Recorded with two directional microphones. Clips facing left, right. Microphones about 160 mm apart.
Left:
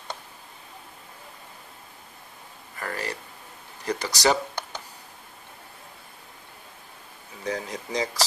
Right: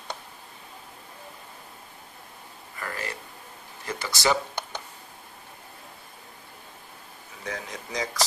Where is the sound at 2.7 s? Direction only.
40° left (ahead or behind).